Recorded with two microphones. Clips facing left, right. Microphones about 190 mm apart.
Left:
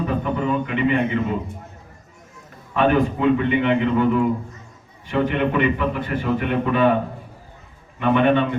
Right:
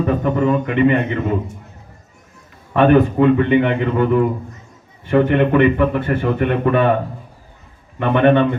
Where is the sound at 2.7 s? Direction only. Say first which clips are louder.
Right 6 dB; 60° right (ahead or behind).